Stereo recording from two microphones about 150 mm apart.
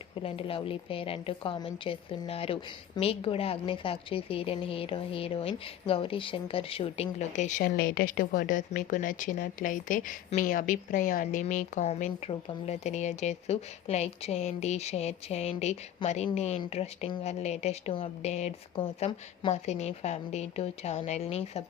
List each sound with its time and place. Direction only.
0.2 s speech: 40° left (ahead or behind)
7.6 s a woman's voice: 80° left; by 21.6 s 45° left (ahead or behind)